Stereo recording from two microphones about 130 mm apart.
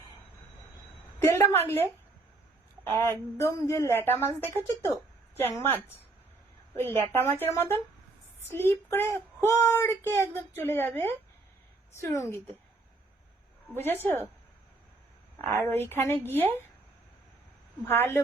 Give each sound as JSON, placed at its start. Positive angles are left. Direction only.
{"t": 1.2, "sound": "speech", "side_deg": 15}
{"t": 2.9, "sound": "a woman's voice", "side_deg": 20}
{"t": 13.7, "sound": "speech", "side_deg": 15}
{"t": 15.7, "sound": "speech", "side_deg": 15}
{"t": 17.8, "sound": "speech", "side_deg": 15}